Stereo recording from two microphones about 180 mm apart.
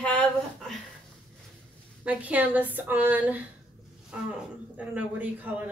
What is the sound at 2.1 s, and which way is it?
Speech, 10° right (ahead or behind).